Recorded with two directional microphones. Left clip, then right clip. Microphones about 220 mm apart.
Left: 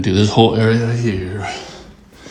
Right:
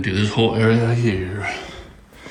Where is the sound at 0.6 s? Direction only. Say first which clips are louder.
Left 1 dB; centre (ahead or behind).